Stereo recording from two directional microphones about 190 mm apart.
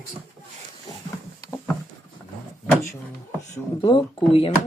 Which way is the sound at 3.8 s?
25° left (ahead or behind).